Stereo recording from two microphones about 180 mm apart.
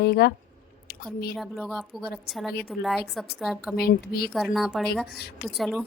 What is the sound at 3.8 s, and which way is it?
Speech, 60° left (ahead or behind).